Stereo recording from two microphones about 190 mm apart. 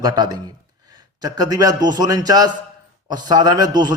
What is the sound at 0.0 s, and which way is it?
A man's voice, 20° right (ahead or behind).